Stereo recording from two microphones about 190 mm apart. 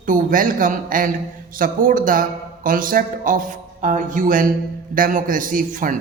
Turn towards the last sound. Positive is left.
turn(degrees=-45)  # may be behind; listen again after turning